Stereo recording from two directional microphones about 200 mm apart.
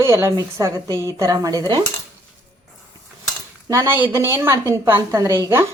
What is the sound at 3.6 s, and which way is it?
Speech, 15° right (ahead or behind).